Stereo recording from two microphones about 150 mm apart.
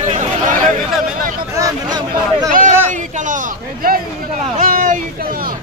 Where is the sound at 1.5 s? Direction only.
25° right (ahead or behind).